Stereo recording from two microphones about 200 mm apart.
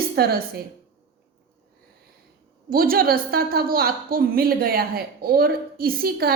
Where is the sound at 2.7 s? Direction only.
45° right (ahead or behind).